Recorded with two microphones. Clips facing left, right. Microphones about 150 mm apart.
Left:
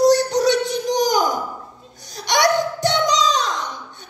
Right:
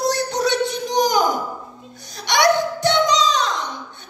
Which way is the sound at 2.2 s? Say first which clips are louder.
Right 1 dB; 40° left (ahead or behind).